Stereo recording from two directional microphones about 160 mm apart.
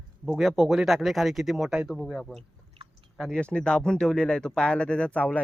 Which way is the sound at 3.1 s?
5° left (ahead or behind).